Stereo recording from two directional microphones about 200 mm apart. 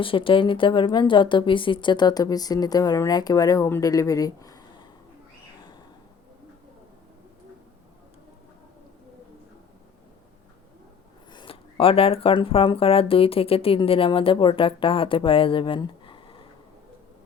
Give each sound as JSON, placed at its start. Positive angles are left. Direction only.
{"t": 0.0, "sound": "speech", "side_deg": 25}
{"t": 11.3, "sound": "speech", "side_deg": 25}